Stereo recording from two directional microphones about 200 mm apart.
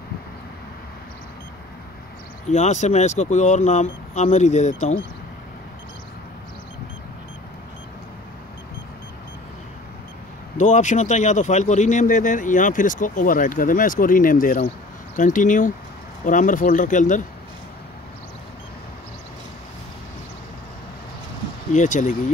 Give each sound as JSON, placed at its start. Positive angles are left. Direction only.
{"t": 2.5, "sound": "a man's voice", "side_deg": 35}
{"t": 10.6, "sound": "a man's voice", "side_deg": 35}
{"t": 21.7, "sound": "a man's voice", "side_deg": 40}